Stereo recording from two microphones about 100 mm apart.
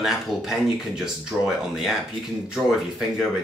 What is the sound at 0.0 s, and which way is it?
Speech, 5° right (ahead or behind).